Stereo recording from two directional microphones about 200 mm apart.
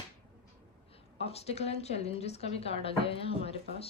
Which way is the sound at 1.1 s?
30° left (ahead or behind).